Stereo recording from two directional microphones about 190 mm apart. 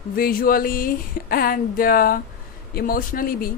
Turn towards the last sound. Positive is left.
turn(degrees=50)  # may be behind; listen again after turning